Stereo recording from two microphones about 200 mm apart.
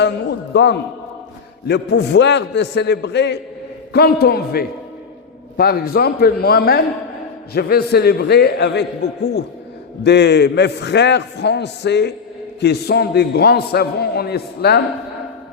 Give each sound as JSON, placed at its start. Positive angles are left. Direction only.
{"t": 0.0, "sound": "a man's voice", "side_deg": 60}